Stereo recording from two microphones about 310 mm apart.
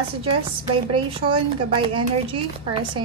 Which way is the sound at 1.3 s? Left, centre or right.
Centre.